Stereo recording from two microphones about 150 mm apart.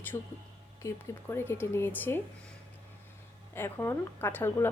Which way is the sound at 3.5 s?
15° left (ahead or behind).